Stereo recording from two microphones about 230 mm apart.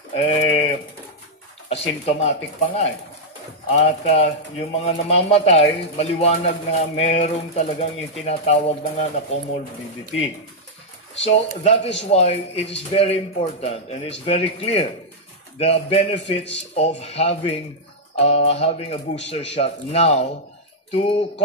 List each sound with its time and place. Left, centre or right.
0.1 s pigeon: left
1.7 s speech: left
11.2 s speech: left